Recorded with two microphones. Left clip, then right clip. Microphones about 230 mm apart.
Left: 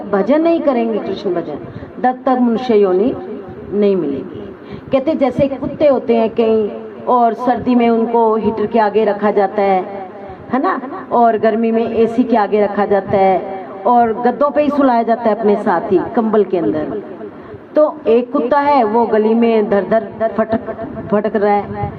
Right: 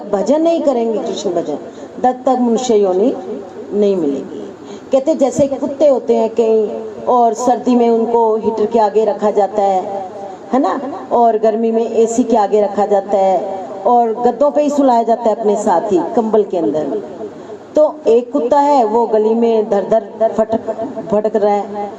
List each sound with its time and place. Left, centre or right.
0.1 s a man's voice: left
4.9 s a man's voice: left